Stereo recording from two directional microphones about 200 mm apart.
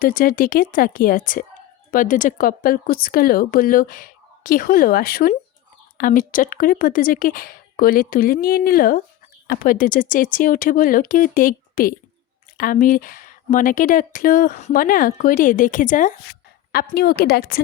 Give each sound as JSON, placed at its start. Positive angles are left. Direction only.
{"t": 0.0, "sound": "speech", "side_deg": 45}
{"t": 16.7, "sound": "speech", "side_deg": 50}